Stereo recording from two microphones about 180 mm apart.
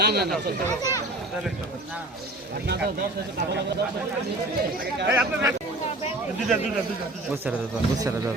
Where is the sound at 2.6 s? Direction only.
60° right (ahead or behind).